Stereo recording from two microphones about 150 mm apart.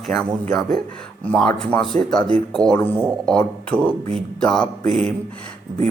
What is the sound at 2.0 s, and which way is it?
A man's voice, 5° left (ahead or behind).